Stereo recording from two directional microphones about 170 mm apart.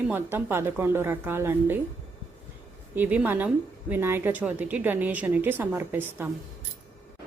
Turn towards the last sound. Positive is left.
turn(degrees=-10)  # may be behind; listen again after turning